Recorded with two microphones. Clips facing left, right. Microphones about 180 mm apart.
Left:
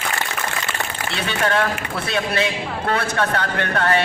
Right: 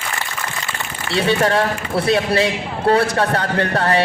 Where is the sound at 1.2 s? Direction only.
35° right (ahead or behind).